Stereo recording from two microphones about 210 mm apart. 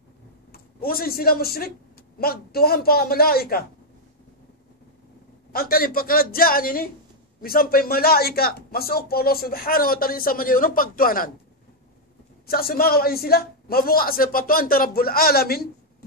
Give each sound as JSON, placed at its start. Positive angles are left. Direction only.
{"t": 0.5, "sound": "speech", "side_deg": 45}
{"t": 5.5, "sound": "speech", "side_deg": 45}
{"t": 12.4, "sound": "speech", "side_deg": 45}